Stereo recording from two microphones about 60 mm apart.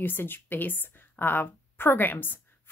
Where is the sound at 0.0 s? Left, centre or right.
Left.